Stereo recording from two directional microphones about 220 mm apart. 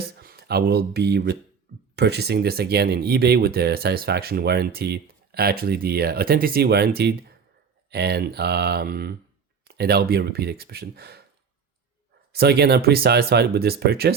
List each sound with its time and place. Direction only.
0.0 s speech: 45° right (ahead or behind)
12.3 s speech: 45° right (ahead or behind)